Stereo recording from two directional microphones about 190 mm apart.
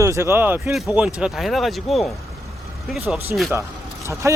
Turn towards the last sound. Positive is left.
turn(degrees=-15)  # may be behind; listen again after turning